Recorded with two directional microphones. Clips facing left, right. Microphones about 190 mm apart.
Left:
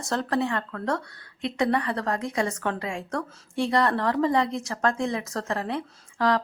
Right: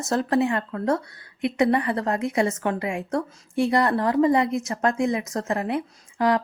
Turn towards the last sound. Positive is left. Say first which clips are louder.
# right 2 dB
turn(degrees=-20)  # may be behind; listen again after turning